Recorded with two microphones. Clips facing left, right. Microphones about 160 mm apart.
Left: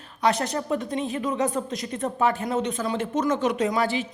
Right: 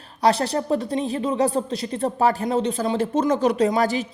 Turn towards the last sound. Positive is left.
turn(degrees=-40)  # may be behind; listen again after turning